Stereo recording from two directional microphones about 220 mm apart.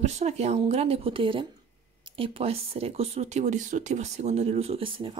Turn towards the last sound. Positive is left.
turn(degrees=-25)  # may be behind; listen again after turning